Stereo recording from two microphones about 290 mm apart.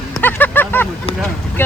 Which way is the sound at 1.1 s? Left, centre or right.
Left.